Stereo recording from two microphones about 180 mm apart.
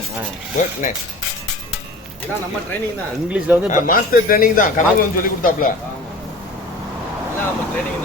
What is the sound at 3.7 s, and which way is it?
A man's voice, 50° left (ahead or behind).